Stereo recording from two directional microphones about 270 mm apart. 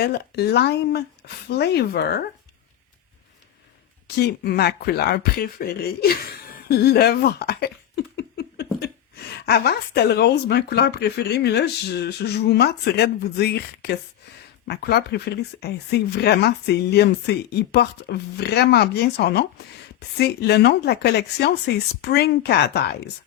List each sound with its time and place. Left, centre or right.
0.0 s speech: left
4.0 s speech: left